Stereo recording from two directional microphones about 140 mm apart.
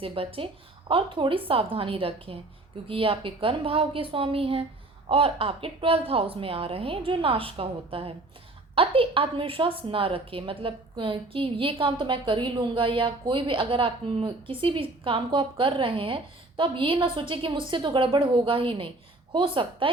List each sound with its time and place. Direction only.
0.0 s a woman's voice: 40° right (ahead or behind)